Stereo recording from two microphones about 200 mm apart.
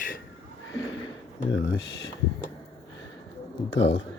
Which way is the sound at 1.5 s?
70° left (ahead or behind).